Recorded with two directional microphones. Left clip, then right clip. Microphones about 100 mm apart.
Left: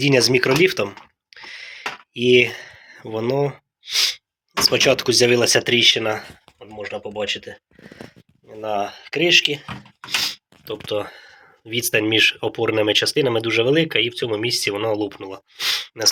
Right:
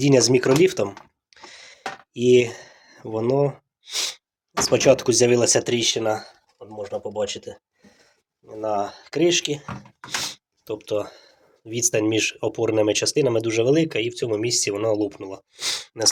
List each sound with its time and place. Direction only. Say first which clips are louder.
0.0 s a sound: left 1 dB; 35° right (ahead or behind)
4.5 s speech: left 1 dB; 50° right (ahead or behind)
5.0 s speech: left 2 dB; 30° right (ahead or behind); by 7.5 s 15° right (ahead or behind)
8.4 s speech: left 1 dB; 30° right (ahead or behind)
10.8 s speech: left 1 dB; 5° right (ahead or behind); by 15.4 s 20° right (ahead or behind)
15.5 s speech: left 5 dB; 35° right (ahead or behind)